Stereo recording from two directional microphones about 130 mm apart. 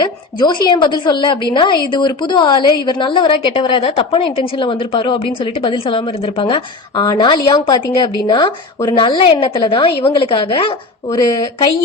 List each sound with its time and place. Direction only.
0.0 s a woman's voice: 35° left (ahead or behind)